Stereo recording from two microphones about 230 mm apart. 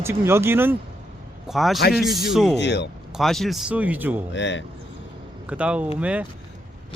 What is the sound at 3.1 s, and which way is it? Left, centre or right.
Speech, centre.